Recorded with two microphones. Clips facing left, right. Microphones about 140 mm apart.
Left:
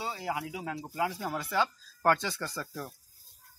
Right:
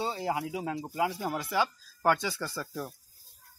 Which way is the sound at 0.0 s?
25° right (ahead or behind).